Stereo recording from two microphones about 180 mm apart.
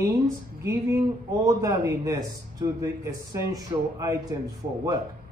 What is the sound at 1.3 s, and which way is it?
A man's voice, 20° right (ahead or behind).